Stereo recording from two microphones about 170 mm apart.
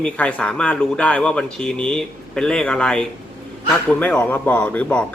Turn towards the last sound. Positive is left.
turn(degrees=5)  # may be behind; listen again after turning